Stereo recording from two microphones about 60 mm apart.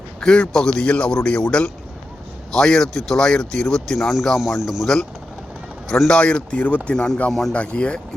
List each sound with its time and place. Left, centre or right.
0.2 s speech: centre
6.1 s speech: centre
7.3 s speech: centre
7.5 s speech: centre